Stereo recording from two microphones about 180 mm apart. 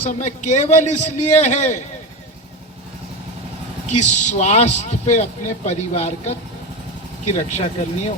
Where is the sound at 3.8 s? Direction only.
40° left (ahead or behind).